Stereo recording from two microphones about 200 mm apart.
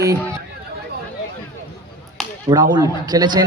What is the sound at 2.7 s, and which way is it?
Speech, 20° right (ahead or behind).